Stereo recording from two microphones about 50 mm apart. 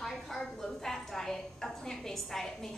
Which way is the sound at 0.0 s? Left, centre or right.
Centre.